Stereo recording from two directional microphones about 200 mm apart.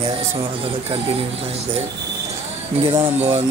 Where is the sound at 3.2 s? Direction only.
30° right (ahead or behind).